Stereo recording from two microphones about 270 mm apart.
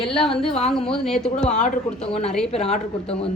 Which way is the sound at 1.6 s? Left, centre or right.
Left.